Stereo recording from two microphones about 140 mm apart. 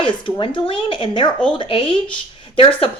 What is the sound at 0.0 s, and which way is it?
A woman's voice, 35° left (ahead or behind).